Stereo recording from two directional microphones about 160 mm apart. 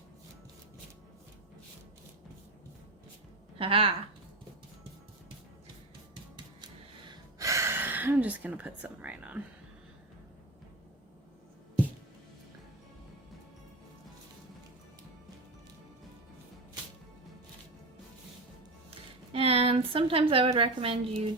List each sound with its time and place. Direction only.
3.6 s speech: 35° right (ahead or behind)
7.3 s speech: 20° right (ahead or behind)
18.9 s a sound: 35° right (ahead or behind)